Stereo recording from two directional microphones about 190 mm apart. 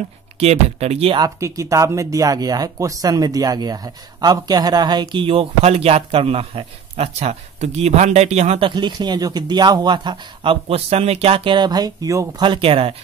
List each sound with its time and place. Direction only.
0.4 s speech: 35° right (ahead or behind)
1.2 s speech: 15° right (ahead or behind)